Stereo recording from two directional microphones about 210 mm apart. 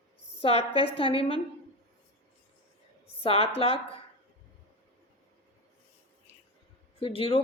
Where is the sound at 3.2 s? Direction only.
25° left (ahead or behind).